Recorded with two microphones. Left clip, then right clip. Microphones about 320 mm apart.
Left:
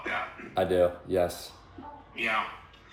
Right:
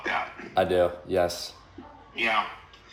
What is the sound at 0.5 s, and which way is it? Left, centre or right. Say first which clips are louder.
Speech: right 2 dB; centre.